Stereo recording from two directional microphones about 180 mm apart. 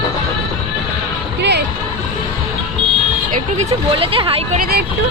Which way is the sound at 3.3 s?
45° right (ahead or behind).